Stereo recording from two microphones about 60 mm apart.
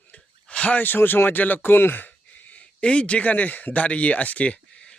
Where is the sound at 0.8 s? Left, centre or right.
Left.